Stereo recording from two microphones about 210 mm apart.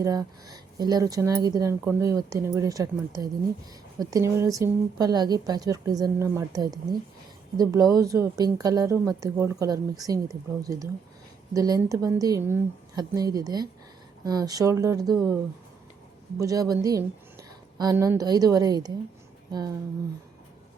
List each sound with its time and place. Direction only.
0.0 s speech: 15° right (ahead or behind)
16.4 s speech: 15° right (ahead or behind)